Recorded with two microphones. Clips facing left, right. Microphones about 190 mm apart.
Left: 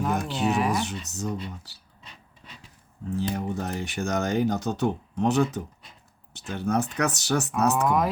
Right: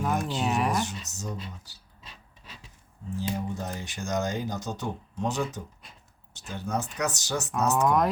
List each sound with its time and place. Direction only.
0.0 s a sound: centre (ahead or behind)
0.9 s speech: 60° left (ahead or behind)
3.2 s speech: 65° left (ahead or behind)
7.9 s speech: centre (ahead or behind)